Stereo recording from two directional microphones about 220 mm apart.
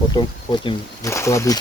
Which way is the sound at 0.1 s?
20° left (ahead or behind).